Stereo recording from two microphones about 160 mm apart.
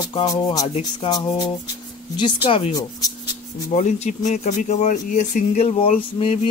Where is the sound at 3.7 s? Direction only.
50° left (ahead or behind).